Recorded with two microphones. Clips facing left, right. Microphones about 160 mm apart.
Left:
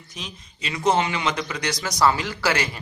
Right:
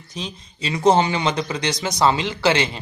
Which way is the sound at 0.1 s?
30° right (ahead or behind).